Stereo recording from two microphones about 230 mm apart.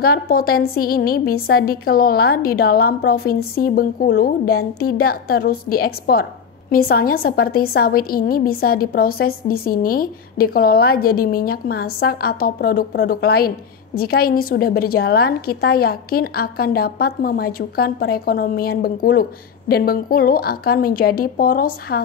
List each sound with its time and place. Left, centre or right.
0.0 s a woman's voice: left